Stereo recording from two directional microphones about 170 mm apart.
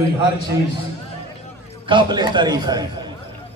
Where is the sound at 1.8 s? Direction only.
30° right (ahead or behind).